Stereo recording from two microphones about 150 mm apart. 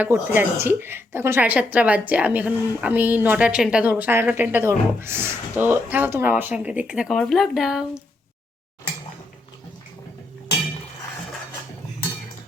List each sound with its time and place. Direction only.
0.0 s speech: 15° right (ahead or behind)